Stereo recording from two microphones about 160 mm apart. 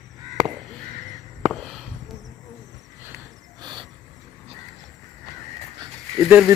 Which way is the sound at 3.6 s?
30° right (ahead or behind).